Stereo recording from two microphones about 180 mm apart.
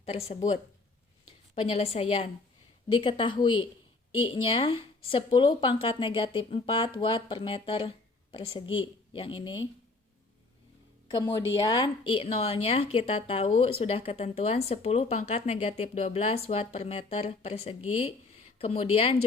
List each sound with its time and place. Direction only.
0.0 s a woman's voice: 35° left (ahead or behind)
1.5 s a woman's voice: 30° left (ahead or behind)
11.2 s a woman's voice: 25° left (ahead or behind)